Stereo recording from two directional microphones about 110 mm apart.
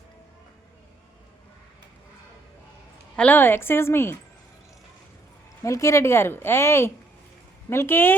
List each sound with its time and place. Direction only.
3.2 s a woman's voice: 15° left (ahead or behind)
5.6 s a woman's voice: 30° left (ahead or behind)